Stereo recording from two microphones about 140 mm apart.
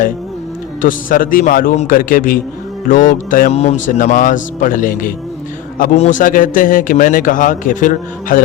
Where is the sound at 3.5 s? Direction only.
50° left (ahead or behind).